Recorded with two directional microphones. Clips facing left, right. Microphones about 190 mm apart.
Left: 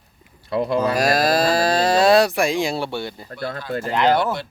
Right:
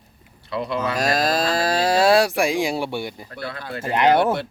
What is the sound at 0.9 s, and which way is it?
Moo, 5° left (ahead or behind).